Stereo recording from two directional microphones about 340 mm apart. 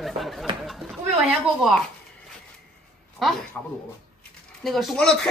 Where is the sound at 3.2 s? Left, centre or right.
Centre.